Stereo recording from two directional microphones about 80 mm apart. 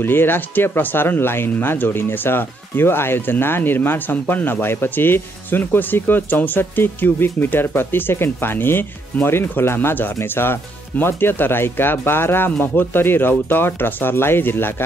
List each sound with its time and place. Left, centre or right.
0.0 s speech: left